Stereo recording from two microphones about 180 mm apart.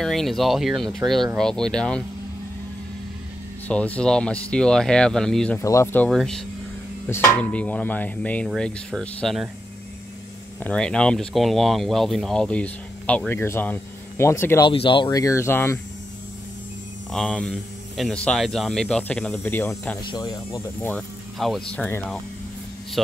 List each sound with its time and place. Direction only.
0.0 s speech: centre (ahead or behind)
3.6 s speech: 10° left (ahead or behind)
5.6 s speech: 15° left (ahead or behind)
6.0 s speech: centre (ahead or behind)
10.6 s speech: 5° left (ahead or behind)
14.7 s speech: 30° left (ahead or behind)
17.1 s speech: centre (ahead or behind)
20.0 s speech: 25° left (ahead or behind)
21.4 s speech: centre (ahead or behind)